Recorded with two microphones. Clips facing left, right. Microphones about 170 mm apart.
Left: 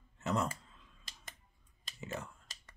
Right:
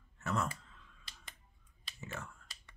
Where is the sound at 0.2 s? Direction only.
20° left (ahead or behind).